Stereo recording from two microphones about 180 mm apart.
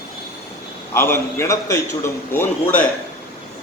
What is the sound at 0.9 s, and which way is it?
A man's voice, 15° left (ahead or behind).